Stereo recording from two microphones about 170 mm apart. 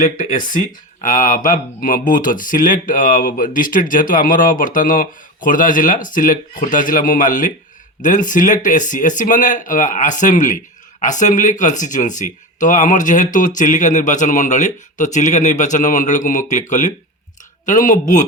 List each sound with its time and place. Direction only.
0.0 s speech: 50° left (ahead or behind)